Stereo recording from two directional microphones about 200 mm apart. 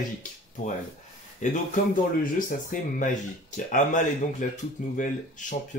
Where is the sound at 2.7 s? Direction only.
40° left (ahead or behind).